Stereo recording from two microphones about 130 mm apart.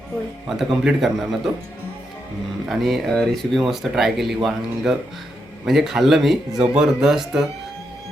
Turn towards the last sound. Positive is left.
turn(degrees=-5)  # may be behind; listen again after turning